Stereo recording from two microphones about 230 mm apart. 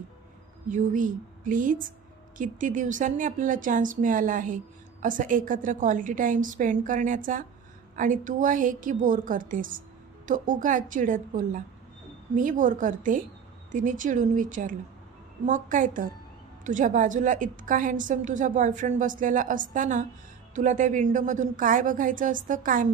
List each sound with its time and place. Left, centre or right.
0.7 s a woman's voice: right